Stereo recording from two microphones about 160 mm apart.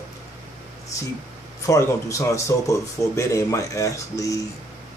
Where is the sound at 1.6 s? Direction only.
20° left (ahead or behind).